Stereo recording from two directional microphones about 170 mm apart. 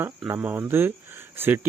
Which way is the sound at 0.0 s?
15° right (ahead or behind).